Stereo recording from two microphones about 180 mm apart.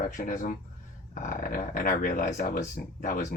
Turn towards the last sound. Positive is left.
turn(degrees=45)  # may be behind; listen again after turning